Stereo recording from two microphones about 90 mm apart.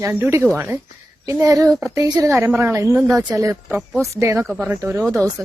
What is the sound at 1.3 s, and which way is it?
A woman's voice, 40° right (ahead or behind).